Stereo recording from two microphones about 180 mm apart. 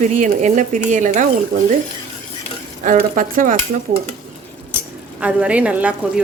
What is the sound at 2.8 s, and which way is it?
Speech, 45° right (ahead or behind).